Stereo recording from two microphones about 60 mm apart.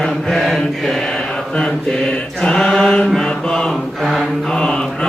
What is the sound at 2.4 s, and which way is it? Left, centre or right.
Mantra, centre.